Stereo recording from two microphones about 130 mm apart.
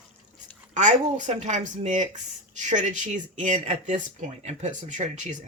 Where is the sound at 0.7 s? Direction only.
65° right (ahead or behind).